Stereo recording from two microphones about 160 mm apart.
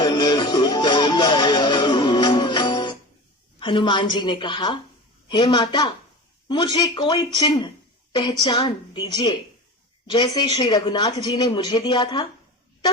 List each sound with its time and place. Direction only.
0.0 s music: 25° left (ahead or behind)
3.6 s speech: 30° left (ahead or behind)